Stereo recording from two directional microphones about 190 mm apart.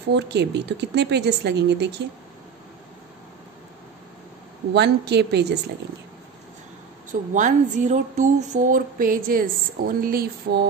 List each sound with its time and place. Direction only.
0.1 s speech: 65° right (ahead or behind)
4.7 s speech: 60° right (ahead or behind)
7.1 s speech: 40° right (ahead or behind)